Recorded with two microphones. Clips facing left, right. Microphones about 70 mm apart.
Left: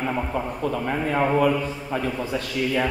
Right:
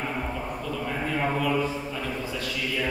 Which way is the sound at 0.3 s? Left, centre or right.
Left.